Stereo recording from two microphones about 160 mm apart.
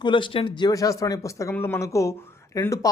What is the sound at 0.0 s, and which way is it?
Speech, 30° left (ahead or behind).